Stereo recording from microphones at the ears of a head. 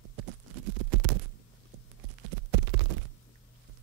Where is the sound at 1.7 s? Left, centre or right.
Right.